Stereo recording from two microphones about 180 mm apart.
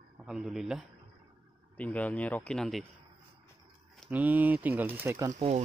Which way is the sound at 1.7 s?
10° left (ahead or behind).